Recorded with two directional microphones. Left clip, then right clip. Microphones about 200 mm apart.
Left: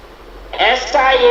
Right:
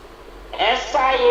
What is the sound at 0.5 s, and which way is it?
Speech, 50° left (ahead or behind).